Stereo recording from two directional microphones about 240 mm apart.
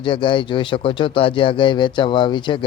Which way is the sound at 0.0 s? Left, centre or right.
Left.